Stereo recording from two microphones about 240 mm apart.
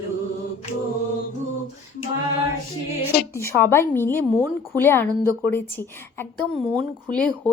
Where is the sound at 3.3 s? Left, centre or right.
Centre.